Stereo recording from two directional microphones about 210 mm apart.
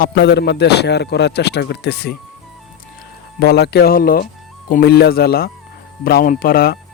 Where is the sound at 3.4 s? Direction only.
50° left (ahead or behind).